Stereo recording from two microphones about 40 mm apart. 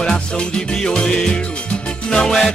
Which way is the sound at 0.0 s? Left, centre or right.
Centre.